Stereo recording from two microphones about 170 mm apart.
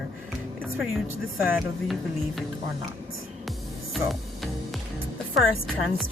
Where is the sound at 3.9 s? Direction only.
Centre (ahead or behind).